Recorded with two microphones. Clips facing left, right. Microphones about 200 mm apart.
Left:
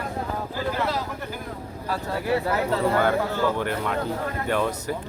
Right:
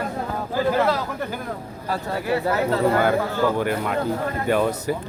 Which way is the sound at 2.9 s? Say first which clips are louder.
Right 2 dB; 10° right (ahead or behind).